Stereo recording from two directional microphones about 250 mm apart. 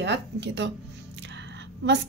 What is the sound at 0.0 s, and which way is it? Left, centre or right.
Speech, right.